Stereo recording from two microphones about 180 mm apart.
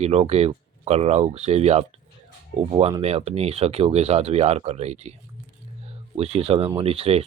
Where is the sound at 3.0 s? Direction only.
35° right (ahead or behind).